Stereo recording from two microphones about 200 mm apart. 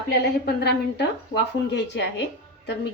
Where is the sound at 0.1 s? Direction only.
55° left (ahead or behind).